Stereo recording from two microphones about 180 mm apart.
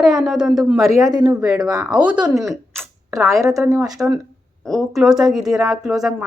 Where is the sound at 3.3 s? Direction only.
15° right (ahead or behind).